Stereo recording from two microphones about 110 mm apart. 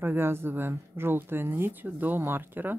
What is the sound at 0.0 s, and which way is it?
Speech, 20° right (ahead or behind).